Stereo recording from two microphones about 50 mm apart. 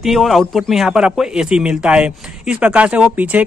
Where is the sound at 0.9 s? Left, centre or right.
Centre.